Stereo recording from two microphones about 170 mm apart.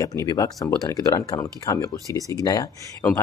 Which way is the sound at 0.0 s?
20° left (ahead or behind).